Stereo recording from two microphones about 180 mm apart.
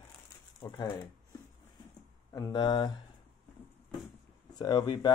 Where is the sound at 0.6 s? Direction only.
25° left (ahead or behind).